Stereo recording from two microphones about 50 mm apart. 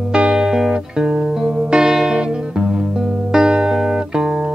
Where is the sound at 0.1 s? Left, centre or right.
Centre.